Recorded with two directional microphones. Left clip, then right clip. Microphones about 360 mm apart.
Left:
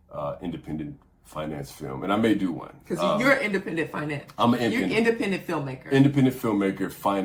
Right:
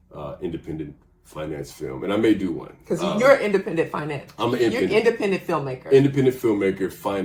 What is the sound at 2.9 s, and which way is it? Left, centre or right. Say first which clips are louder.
Speech: right 5 dB; centre.